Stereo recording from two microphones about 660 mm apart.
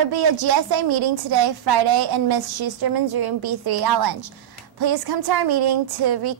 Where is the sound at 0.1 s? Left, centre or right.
Right.